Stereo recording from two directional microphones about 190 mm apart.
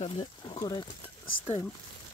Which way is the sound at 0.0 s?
30° left (ahead or behind).